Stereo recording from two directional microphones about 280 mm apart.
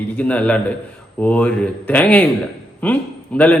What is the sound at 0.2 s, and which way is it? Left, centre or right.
A man's voice, centre.